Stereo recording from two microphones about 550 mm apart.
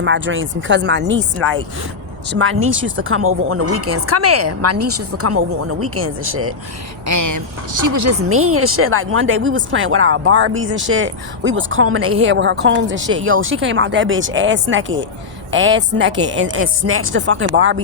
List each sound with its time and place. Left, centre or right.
0.0 s a woman's voice: centre